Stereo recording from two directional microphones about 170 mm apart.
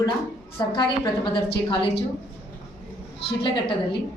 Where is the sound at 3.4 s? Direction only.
30° left (ahead or behind).